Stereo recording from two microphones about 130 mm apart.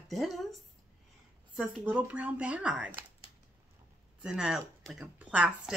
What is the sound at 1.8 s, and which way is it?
Speech, 10° right (ahead or behind).